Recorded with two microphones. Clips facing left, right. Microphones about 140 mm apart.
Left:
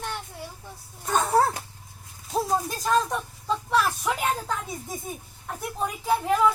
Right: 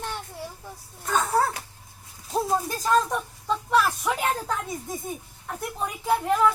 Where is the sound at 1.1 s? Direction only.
30° left (ahead or behind).